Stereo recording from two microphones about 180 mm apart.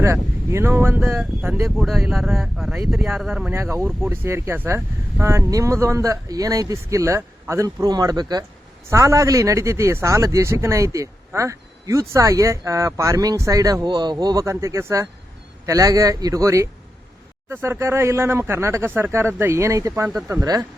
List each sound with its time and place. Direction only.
0.0 s a man's voice: 15° right (ahead or behind)
1.7 s a man's voice: centre (ahead or behind); by 20.7 s 15° right (ahead or behind)